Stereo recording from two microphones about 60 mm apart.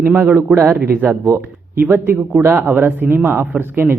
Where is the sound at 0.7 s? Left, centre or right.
Right.